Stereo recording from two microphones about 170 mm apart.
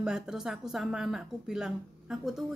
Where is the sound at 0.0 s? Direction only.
5° right (ahead or behind).